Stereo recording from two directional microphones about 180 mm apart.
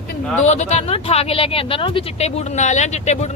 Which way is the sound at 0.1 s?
40° left (ahead or behind).